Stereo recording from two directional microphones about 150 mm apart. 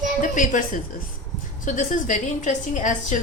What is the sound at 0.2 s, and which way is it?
A woman's voice, 60° left (ahead or behind).